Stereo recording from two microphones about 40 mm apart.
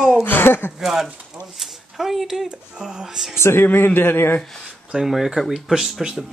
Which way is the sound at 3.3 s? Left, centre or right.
Left.